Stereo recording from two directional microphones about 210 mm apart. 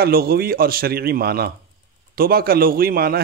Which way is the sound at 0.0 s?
45° right (ahead or behind).